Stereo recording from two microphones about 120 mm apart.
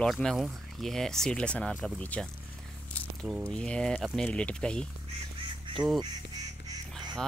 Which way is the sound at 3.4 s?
10° left (ahead or behind).